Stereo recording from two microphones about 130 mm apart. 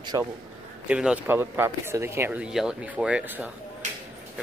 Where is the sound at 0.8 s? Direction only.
10° right (ahead or behind).